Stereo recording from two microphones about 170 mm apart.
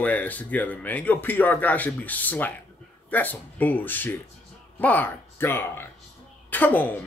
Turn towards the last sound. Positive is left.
turn(degrees=10)  # may be behind; listen again after turning